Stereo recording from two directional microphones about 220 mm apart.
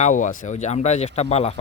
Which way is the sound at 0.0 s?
35° left (ahead or behind).